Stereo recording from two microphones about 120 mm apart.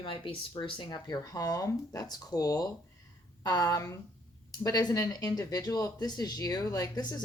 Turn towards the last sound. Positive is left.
turn(degrees=30)  # may be behind; listen again after turning